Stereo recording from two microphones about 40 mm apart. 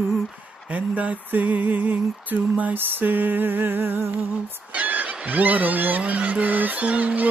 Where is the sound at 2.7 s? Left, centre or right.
Right.